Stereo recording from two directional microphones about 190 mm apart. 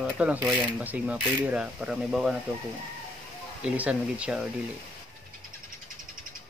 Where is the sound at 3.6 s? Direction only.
5° right (ahead or behind).